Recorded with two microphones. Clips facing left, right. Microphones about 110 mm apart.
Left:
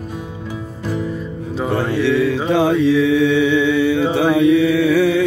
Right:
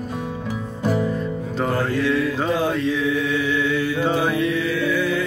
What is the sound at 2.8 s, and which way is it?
Chant, 85° left.